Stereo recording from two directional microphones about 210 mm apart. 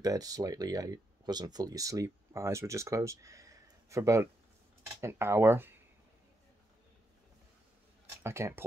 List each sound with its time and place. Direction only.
0.0 s speech: 15° right (ahead or behind)
8.2 s speech: 10° right (ahead or behind)